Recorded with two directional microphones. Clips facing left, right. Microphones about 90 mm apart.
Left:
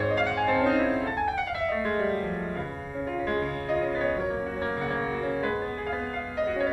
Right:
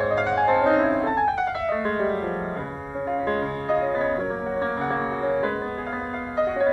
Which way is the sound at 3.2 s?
30° right (ahead or behind).